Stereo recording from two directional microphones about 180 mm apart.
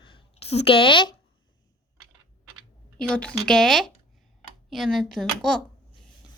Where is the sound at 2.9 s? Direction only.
5° left (ahead or behind).